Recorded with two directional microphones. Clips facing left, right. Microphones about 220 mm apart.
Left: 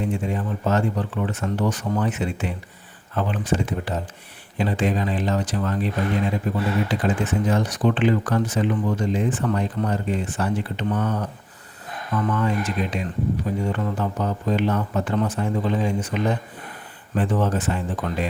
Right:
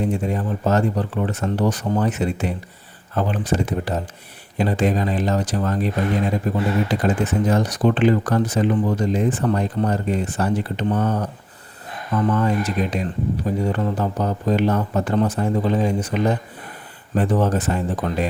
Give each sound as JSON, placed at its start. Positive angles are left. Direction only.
{"t": 0.0, "sound": "speech", "side_deg": -40}
{"t": 17.2, "sound": "speech", "side_deg": -40}